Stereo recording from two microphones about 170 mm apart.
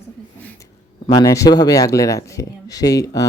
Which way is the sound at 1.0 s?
20° left (ahead or behind).